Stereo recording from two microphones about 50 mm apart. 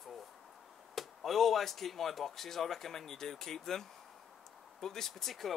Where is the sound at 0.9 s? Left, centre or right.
Centre.